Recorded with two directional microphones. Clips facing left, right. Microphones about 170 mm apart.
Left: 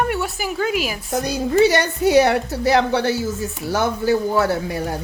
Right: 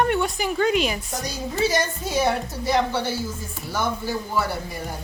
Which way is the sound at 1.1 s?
60° left (ahead or behind).